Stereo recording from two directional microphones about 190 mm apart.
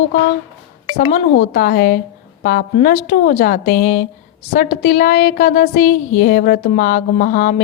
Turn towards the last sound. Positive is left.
turn(degrees=45)  # may be behind; listen again after turning